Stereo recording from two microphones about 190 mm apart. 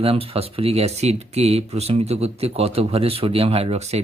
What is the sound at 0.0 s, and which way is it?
Speech, 30° right (ahead or behind).